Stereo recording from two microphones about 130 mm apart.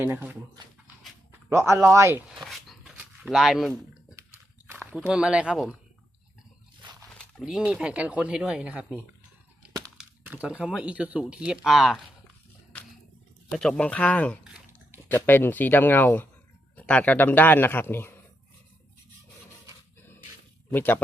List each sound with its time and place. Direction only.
0.0 s speech: 15° right (ahead or behind)
2.4 s dog: centre (ahead or behind)
3.2 s speech: 5° right (ahead or behind)
4.3 s a sound: 10° right (ahead or behind)
6.8 s wild animals: 35° right (ahead or behind)
7.2 s speech: centre (ahead or behind)
10.0 s speech: 10° right (ahead or behind)
13.5 s speech: 5° left (ahead or behind)
20.7 s speech: 15° left (ahead or behind)